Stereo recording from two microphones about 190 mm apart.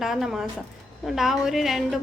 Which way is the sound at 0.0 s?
Centre (ahead or behind).